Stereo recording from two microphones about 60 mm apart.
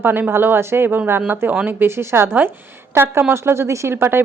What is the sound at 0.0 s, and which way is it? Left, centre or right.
Speech, right.